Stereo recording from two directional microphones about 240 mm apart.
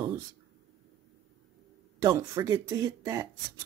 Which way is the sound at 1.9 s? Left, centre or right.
Centre.